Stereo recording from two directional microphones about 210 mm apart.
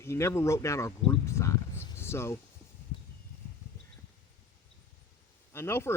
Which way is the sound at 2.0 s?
10° left (ahead or behind).